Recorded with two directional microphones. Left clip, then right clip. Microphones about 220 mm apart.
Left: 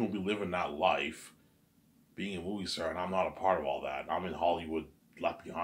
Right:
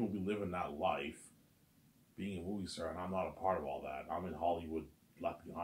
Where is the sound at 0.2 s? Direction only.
20° left (ahead or behind).